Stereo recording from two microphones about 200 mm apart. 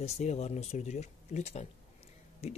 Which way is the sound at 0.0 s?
30° left (ahead or behind).